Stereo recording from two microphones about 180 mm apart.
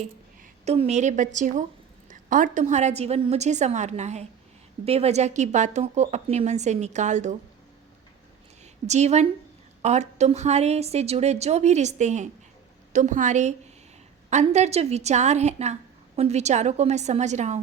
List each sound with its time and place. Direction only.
0.6 s a woman's voice: 35° right (ahead or behind)
8.9 s a woman's voice: 40° right (ahead or behind)